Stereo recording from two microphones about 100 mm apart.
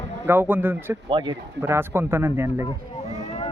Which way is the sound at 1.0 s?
50° right (ahead or behind).